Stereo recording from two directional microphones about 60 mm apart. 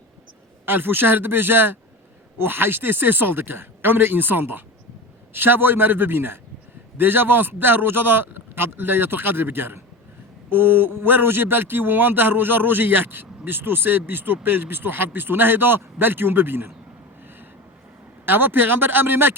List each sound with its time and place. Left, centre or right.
0.6 s a man's voice: right
18.3 s a man's voice: right